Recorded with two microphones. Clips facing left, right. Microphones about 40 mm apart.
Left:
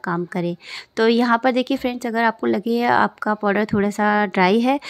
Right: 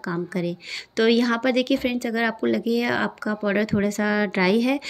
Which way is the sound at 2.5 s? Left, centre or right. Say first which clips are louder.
Left 4 dB; centre.